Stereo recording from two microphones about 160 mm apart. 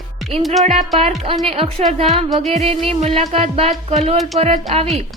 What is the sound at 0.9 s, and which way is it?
Speech, 40° right (ahead or behind).